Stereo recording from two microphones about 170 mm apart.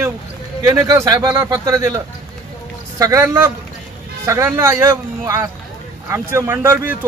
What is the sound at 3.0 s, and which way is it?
A man's voice, 15° right (ahead or behind).